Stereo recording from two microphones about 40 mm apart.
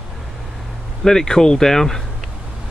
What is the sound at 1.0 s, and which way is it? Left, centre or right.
Speech, centre.